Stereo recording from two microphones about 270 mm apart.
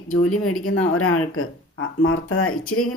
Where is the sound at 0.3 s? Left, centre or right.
Left.